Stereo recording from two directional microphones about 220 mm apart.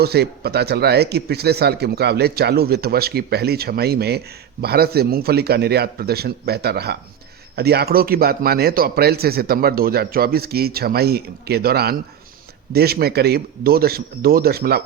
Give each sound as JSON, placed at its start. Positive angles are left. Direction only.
{"t": 0.0, "sound": "a man's voice", "side_deg": -45}